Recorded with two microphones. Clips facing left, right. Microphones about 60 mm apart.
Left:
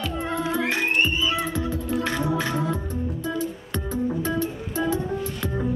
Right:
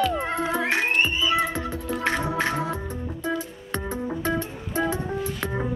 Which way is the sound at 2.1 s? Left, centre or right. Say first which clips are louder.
Right 4 dB; right.